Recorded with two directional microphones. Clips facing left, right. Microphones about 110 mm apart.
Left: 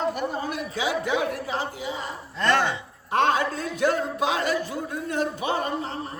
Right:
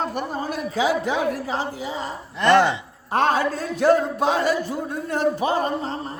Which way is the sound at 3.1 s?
35° right (ahead or behind).